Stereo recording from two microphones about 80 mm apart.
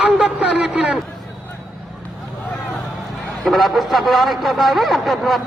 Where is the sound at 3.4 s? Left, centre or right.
Centre.